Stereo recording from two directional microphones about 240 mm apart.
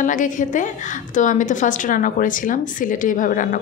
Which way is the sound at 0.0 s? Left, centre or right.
Left.